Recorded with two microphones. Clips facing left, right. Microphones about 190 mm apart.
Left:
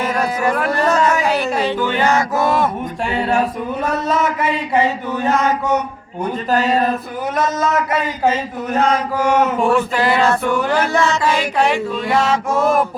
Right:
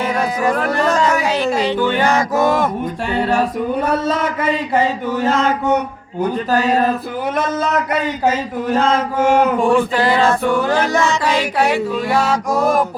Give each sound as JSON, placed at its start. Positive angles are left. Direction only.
{"t": 8.7, "sound": "mantra", "side_deg": -25}
{"t": 12.5, "sound": "music", "side_deg": -35}